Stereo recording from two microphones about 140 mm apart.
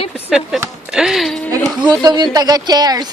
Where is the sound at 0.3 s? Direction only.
5° right (ahead or behind).